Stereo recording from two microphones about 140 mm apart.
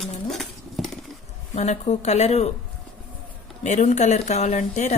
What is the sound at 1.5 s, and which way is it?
Speech, 55° left (ahead or behind).